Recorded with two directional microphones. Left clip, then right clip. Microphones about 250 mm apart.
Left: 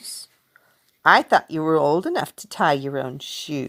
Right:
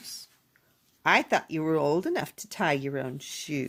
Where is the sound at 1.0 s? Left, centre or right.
Centre.